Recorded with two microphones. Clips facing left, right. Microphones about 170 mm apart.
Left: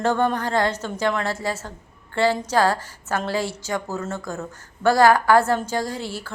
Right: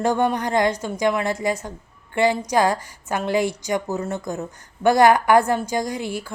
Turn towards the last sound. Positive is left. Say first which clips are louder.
# right 3 dB
turn(degrees=-15)  # may be behind; listen again after turning